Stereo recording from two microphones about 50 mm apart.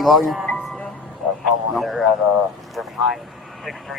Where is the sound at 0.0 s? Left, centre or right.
Centre.